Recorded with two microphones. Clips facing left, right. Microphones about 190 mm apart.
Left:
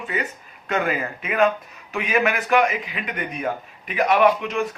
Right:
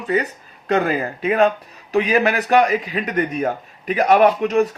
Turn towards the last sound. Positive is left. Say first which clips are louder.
# right 4 dB
turn(degrees=-40)  # may be behind; listen again after turning